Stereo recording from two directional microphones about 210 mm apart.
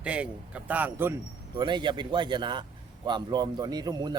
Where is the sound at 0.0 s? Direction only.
5° right (ahead or behind).